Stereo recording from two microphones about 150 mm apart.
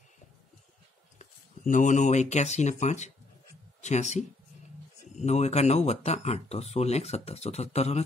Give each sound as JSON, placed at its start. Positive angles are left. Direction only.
{"t": 1.1, "sound": "speech", "side_deg": 55}